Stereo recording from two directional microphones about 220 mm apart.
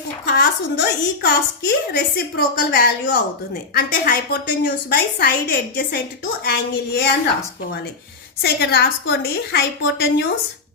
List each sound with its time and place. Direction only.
0.3 s a woman's voice: 45° left (ahead or behind)
8.4 s a woman's voice: 50° left (ahead or behind)